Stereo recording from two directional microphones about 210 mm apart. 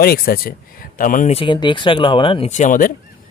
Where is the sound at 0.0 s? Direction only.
45° left (ahead or behind).